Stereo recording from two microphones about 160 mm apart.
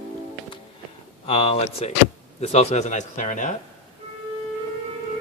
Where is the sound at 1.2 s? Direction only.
35° left (ahead or behind); by 3.5 s 50° left (ahead or behind).